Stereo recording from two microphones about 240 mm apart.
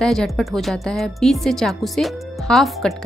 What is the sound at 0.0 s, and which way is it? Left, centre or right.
Speech, centre.